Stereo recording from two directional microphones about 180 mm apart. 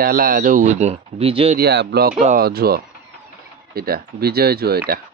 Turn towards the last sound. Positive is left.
turn(degrees=-60)  # may be behind; listen again after turning